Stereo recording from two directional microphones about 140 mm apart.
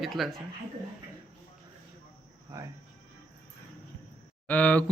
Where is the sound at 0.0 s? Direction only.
Centre (ahead or behind).